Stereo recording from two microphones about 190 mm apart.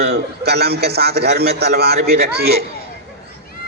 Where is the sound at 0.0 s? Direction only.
60° right (ahead or behind).